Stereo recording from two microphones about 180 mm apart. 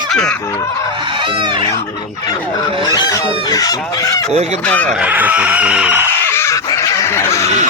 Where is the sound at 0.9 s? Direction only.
25° right (ahead or behind).